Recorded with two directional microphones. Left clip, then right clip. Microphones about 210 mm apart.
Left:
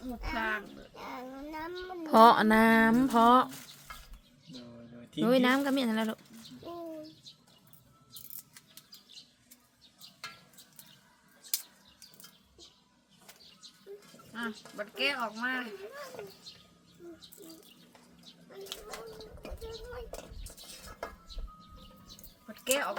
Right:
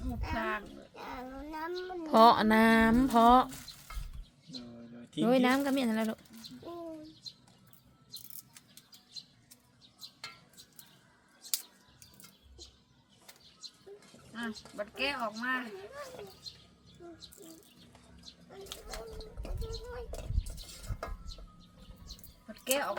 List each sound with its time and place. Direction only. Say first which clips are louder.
0.3 s speech: left 2 dB; 15° left (ahead or behind)
0.9 s speech: left 1 dB; 5° right (ahead or behind)
2.0 s speech: left 2 dB; 15° left (ahead or behind)
4.5 s a sound: right 2 dB; 10° right (ahead or behind)
5.2 s speech: left 1 dB; 5° left (ahead or behind)
11.4 s a sound: even; 45° right (ahead or behind)
13.6 s goat: right 6 dB; 45° right (ahead or behind)
14.3 s speech: left 1 dB; 15° left (ahead or behind)
16.5 s bird: right 3 dB; 45° right (ahead or behind)
18.5 s a sound: left 2 dB; centre (ahead or behind)
19.9 s speech: even; centre (ahead or behind)
22.6 s speech: left 1 dB; 15° left (ahead or behind)